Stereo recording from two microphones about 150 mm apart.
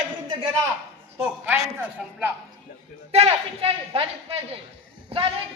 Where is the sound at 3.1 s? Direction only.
40° right (ahead or behind).